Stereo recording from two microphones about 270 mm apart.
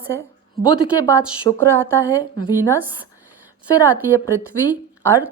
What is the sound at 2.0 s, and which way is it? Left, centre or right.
Speech, centre.